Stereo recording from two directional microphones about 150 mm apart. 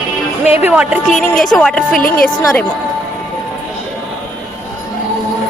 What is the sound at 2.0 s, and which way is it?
Speech, 75° left (ahead or behind).